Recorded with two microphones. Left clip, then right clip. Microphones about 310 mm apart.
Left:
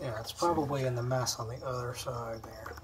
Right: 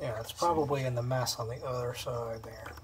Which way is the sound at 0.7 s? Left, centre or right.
Right.